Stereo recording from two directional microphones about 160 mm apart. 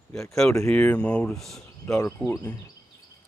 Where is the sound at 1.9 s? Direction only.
20° left (ahead or behind).